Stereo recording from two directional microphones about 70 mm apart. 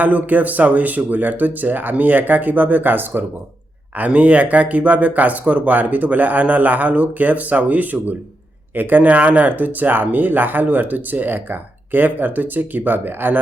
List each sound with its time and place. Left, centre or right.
0.0 s speech: right